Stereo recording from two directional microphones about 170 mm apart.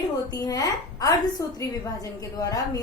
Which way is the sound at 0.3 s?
20° left (ahead or behind).